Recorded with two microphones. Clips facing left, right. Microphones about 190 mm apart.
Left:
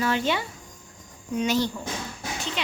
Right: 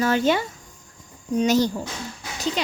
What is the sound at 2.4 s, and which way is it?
Dog, 40° right (ahead or behind).